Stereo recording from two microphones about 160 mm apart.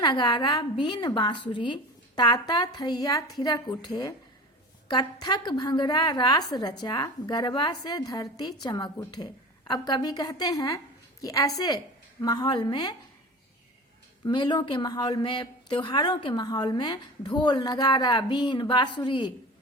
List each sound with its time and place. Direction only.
0.0 s a woman's voice: 25° left (ahead or behind)
14.3 s a woman's voice: 30° left (ahead or behind)